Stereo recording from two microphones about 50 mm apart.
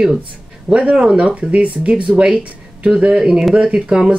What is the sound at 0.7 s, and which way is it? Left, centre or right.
Speech, right.